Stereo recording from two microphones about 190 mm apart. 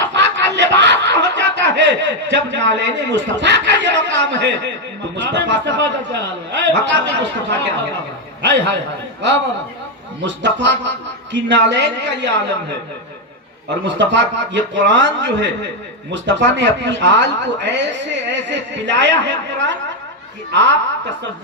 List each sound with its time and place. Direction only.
0.1 s snicker: 70° right (ahead or behind)
5.1 s a man's voice: 65° right (ahead or behind)
10.2 s speech: 70° right (ahead or behind)
13.8 s speech: 70° right (ahead or behind)